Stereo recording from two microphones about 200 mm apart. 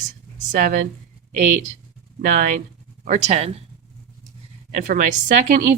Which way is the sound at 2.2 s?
40° right (ahead or behind).